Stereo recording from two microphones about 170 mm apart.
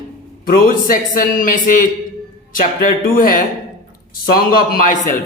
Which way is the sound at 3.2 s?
55° left (ahead or behind).